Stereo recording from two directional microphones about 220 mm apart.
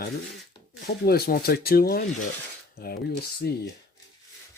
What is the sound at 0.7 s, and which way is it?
Speech, 45° left (ahead or behind).